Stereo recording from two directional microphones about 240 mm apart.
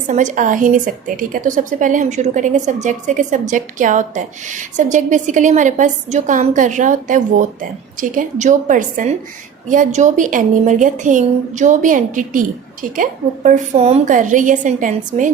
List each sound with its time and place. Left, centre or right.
0.1 s a woman's voice: right